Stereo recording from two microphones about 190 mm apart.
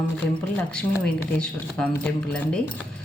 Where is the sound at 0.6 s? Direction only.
5° left (ahead or behind).